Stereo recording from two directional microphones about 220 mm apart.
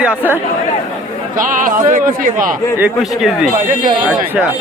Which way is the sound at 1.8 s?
40° right (ahead or behind).